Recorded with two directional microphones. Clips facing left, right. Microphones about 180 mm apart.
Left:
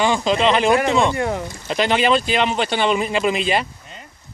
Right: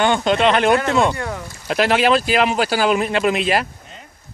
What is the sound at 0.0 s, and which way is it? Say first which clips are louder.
Speech: right 1 dB; centre (ahead or behind).